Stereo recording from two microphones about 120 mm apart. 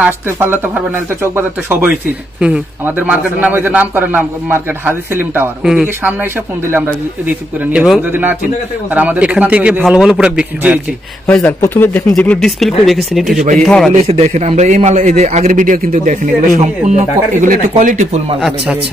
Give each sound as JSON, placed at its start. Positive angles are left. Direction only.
{"t": 0.0, "sound": "a man's voice", "side_deg": -15}
{"t": 5.6, "sound": "a man's voice", "side_deg": -5}
{"t": 11.2, "sound": "speech", "side_deg": 15}
{"t": 13.4, "sound": "a man's voice", "side_deg": -85}
{"t": 14.0, "sound": "a man's voice", "side_deg": -60}